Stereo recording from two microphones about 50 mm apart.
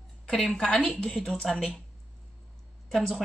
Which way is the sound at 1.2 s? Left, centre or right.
Centre.